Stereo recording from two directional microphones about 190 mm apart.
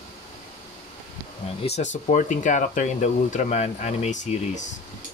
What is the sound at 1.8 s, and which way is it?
Speech, 40° left (ahead or behind).